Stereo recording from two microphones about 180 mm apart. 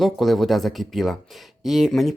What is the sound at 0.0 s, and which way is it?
A man's voice, centre (ahead or behind).